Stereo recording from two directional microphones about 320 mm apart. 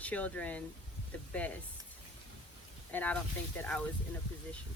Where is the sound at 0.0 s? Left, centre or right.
Centre.